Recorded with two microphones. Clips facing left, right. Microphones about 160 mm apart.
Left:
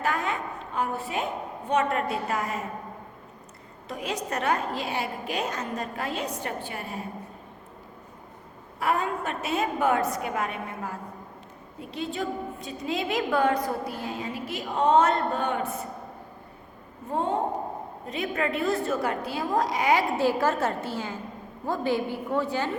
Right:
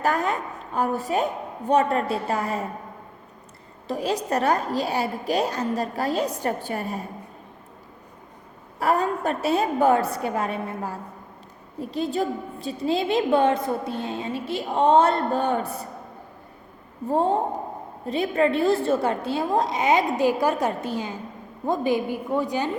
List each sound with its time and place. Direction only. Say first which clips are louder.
0.0 s a woman's voice: right 4 dB; 40° right (ahead or behind)
3.8 s a woman's voice: right 6 dB; 35° right (ahead or behind)
8.8 s a woman's voice: right 4 dB; 35° right (ahead or behind)
17.1 s a woman's voice: right 5 dB; 35° right (ahead or behind); by 22.7 s 15° right (ahead or behind)